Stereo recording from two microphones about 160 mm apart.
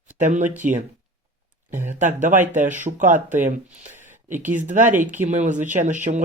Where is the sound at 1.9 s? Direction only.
50° right (ahead or behind).